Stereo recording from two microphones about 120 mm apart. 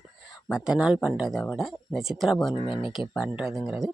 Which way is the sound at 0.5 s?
5° right (ahead or behind).